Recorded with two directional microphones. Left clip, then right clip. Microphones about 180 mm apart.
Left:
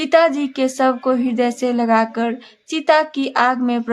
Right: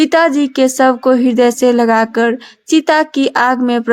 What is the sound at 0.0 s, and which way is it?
Speech, 30° right (ahead or behind).